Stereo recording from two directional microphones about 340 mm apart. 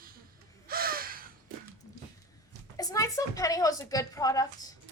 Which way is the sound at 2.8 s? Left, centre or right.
Centre.